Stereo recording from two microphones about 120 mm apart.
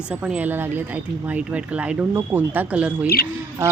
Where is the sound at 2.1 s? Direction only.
20° right (ahead or behind).